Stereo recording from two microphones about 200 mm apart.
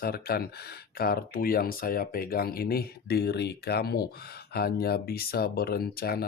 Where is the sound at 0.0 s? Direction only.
50° left (ahead or behind).